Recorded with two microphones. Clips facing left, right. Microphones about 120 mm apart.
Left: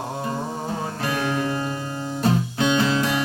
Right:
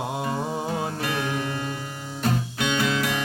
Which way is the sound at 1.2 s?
25° left (ahead or behind).